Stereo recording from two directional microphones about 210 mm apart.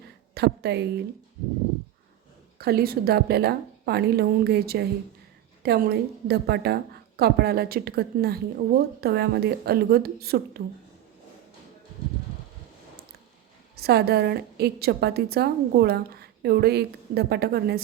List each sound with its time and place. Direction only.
0.3 s a woman's voice: 50° right (ahead or behind)
2.6 s a woman's voice: 45° right (ahead or behind)
13.7 s a woman's voice: 50° right (ahead or behind)